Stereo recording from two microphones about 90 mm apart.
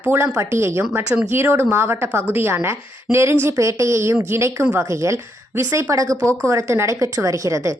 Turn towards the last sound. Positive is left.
turn(degrees=-35)  # may be behind; listen again after turning